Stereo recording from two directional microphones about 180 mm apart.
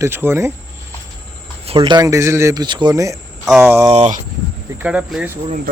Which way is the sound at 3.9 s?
40° right (ahead or behind).